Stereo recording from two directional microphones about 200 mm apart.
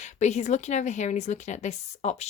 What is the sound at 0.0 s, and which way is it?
A woman's voice, 35° left (ahead or behind).